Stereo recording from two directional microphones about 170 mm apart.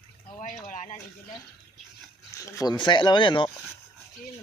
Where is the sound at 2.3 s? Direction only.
20° left (ahead or behind).